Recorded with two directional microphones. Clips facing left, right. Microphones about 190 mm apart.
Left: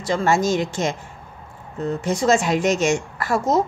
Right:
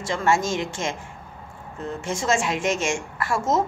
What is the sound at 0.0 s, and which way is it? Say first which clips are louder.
Speech: left 3 dB; 35° left (ahead or behind).